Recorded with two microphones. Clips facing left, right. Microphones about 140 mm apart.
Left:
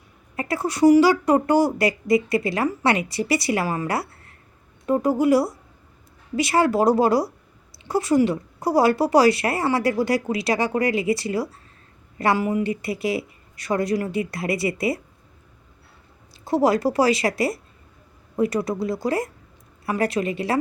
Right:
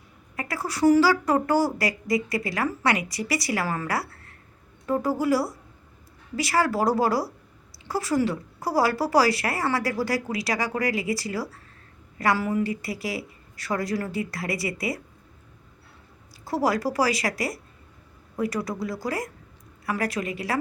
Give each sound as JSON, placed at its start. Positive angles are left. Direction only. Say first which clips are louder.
{"t": 0.3, "sound": "speech", "louder": "left 6 dB", "side_deg": 25}
{"t": 16.4, "sound": "speech", "louder": "left 5 dB", "side_deg": 25}